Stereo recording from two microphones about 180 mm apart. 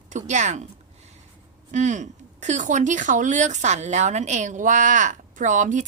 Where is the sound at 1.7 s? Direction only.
40° right (ahead or behind).